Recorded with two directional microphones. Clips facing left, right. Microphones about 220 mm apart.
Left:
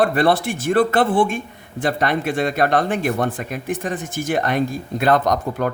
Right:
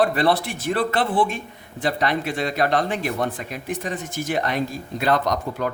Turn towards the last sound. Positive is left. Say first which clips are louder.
# left 4 dB
turn(degrees=50)  # may be behind; listen again after turning